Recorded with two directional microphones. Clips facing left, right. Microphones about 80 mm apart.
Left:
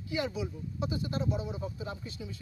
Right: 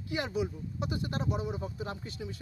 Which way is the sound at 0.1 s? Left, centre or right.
Right.